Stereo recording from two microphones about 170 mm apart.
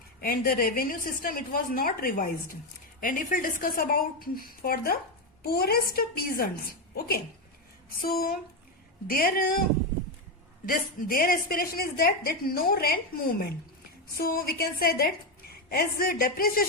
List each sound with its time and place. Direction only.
0.2 s a woman's voice: 60° left (ahead or behind)
8.0 s a woman's voice: 60° left (ahead or behind)
10.7 s a woman's voice: 55° left (ahead or behind)